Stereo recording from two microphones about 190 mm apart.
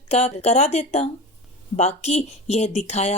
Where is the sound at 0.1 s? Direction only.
35° left (ahead or behind).